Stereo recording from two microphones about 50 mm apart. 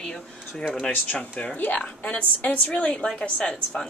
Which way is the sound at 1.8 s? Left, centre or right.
Left.